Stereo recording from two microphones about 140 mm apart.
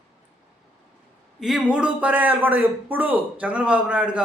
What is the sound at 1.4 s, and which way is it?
A man's voice, 5° right (ahead or behind).